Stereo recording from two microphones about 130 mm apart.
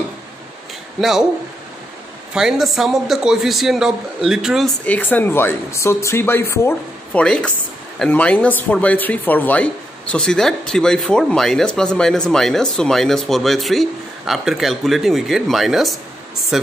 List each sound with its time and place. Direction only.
2.3 s speech: 5° right (ahead or behind)
4.8 s speech: 15° left (ahead or behind)
7.2 s speech: 10° left (ahead or behind)